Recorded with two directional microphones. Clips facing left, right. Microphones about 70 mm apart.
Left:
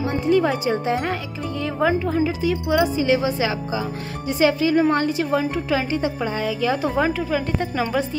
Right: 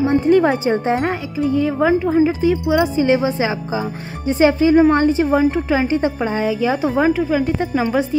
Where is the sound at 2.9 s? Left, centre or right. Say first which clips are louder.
Right 4 dB; right.